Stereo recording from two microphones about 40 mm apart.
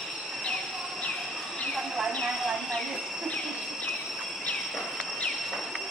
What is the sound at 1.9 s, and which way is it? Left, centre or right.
Train, centre.